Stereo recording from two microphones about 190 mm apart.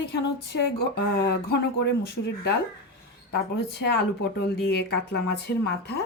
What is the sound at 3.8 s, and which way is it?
Speech, 60° left (ahead or behind).